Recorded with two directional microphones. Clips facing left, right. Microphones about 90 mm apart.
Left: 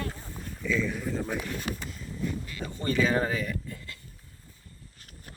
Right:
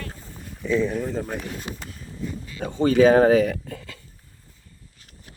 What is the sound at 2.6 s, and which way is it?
Speech, 70° right (ahead or behind).